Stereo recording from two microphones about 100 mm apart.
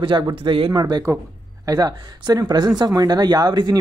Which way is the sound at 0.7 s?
45° right (ahead or behind).